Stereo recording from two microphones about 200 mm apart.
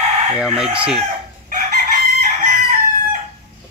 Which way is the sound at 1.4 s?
40° right (ahead or behind).